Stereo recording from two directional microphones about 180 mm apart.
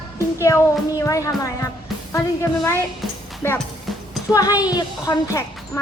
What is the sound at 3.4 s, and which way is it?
A woman's voice, 10° left (ahead or behind).